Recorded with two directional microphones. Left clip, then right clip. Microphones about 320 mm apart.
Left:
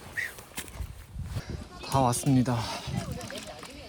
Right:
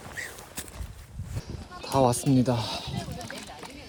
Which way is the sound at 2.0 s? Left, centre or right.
Centre.